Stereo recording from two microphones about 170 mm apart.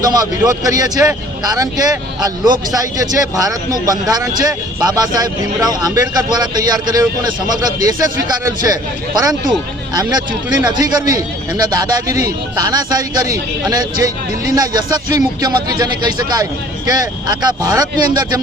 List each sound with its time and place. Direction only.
0.0 s a man's voice: 20° right (ahead or behind)